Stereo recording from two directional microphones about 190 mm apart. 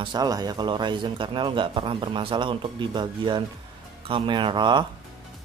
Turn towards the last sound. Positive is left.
turn(degrees=-25)  # may be behind; listen again after turning